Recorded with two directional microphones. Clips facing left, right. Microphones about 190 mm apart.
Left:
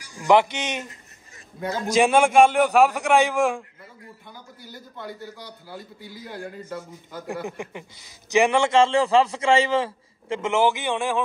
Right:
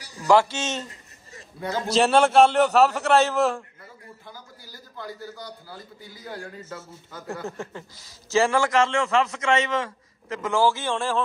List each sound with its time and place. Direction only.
0.1 s a man's voice: 20° left (ahead or behind)
1.9 s a man's voice: 10° left (ahead or behind)
4.6 s a man's voice: 20° left (ahead or behind)